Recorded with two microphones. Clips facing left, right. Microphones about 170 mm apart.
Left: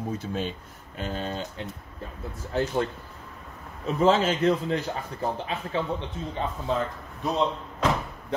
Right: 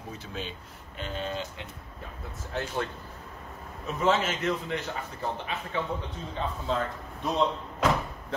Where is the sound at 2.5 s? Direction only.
35° left (ahead or behind).